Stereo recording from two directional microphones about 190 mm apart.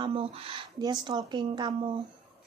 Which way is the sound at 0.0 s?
30° right (ahead or behind).